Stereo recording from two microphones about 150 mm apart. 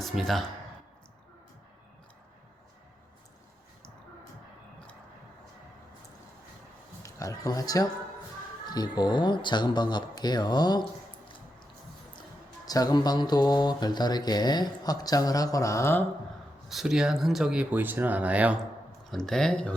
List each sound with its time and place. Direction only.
0.0 s speech: centre (ahead or behind)
7.0 s speech: 20° left (ahead or behind)
12.6 s speech: 25° left (ahead or behind)
16.6 s speech: 5° right (ahead or behind)
19.1 s speech: 5° left (ahead or behind)